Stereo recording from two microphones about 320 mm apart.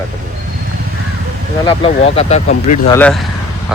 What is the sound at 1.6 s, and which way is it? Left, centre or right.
Speech, centre.